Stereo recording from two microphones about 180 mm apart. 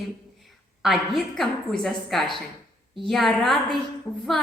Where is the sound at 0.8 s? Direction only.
Centre (ahead or behind).